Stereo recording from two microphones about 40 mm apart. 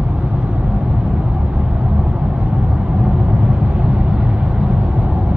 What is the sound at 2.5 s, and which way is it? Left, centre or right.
Vehicle, right.